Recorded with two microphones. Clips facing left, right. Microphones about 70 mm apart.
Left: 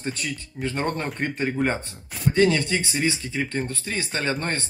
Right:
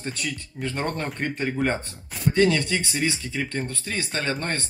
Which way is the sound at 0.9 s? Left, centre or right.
Centre.